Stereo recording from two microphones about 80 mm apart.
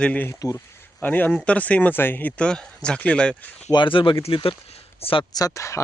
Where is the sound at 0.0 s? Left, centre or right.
Centre.